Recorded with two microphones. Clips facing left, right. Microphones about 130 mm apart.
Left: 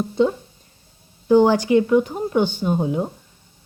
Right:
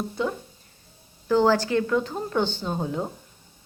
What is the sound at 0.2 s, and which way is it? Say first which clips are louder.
Speech: left 12 dB; 25° left (ahead or behind).